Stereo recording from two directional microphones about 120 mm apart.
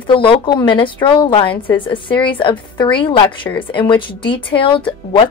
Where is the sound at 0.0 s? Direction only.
45° left (ahead or behind).